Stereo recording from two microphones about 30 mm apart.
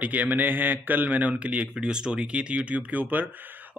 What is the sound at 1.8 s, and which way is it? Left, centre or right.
Speech, right.